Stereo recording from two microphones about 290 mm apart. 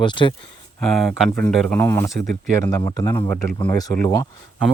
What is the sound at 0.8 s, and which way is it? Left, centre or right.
Speech, centre.